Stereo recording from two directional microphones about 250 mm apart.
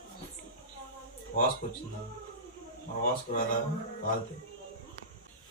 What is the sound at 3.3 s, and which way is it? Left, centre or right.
Speech, left.